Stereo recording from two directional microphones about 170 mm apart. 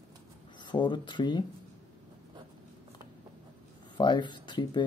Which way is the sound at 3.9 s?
25° left (ahead or behind).